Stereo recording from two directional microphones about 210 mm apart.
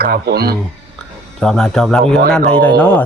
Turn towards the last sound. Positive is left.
turn(degrees=10)  # may be behind; listen again after turning